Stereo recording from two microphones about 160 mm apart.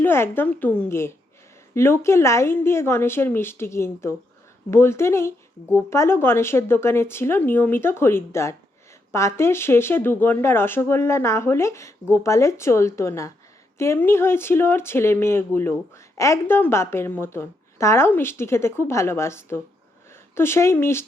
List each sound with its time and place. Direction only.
0.0 s speech: 15° left (ahead or behind)